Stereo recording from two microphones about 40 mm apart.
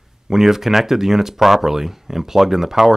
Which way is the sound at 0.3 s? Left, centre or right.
Centre.